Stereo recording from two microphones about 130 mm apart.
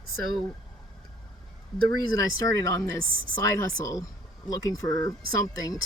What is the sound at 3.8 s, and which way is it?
Speech, 25° left (ahead or behind).